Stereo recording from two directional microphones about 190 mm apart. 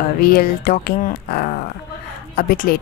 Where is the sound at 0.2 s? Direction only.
50° left (ahead or behind).